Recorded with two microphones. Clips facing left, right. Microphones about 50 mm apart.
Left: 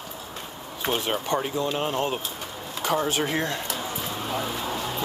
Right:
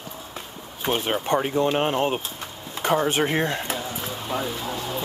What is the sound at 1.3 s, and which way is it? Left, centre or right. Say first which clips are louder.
Speech: right 6 dB; right.